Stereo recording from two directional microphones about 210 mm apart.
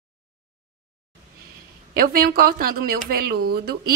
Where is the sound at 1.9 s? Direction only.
45° right (ahead or behind).